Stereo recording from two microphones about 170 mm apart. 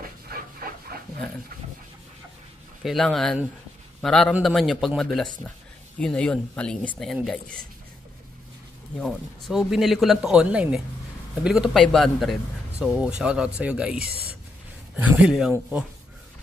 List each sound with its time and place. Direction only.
0.0 s dog: 60° right (ahead or behind)
2.8 s speech: centre (ahead or behind)
8.9 s speech: centre (ahead or behind)